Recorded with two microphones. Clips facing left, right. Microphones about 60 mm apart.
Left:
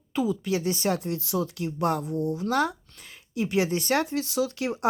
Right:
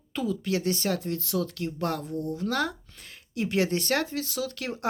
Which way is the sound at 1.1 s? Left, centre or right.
Centre.